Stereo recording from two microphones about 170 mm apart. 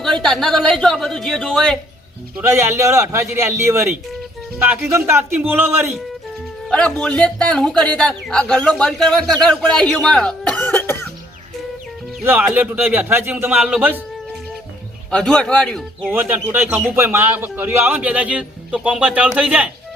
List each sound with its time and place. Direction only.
0.0 s speech: 5° left (ahead or behind)
2.4 s speech: 15° right (ahead or behind)
6.7 s speech: 5° left (ahead or behind)
12.2 s speech: 10° right (ahead or behind)
15.1 s speech: 5° left (ahead or behind)
16.0 s speech: 10° right (ahead or behind)